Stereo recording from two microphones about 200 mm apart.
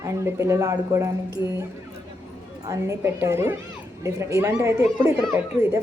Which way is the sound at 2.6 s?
15° right (ahead or behind).